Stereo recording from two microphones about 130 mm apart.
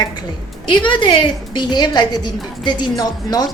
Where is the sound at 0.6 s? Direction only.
40° left (ahead or behind).